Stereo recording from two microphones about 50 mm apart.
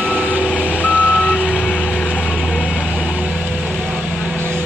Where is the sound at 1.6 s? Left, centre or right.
Left.